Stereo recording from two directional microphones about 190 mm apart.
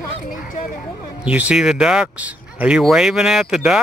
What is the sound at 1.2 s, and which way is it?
Speech, 5° right (ahead or behind).